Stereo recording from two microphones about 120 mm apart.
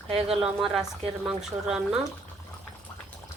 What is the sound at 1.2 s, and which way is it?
Speech, 5° right (ahead or behind).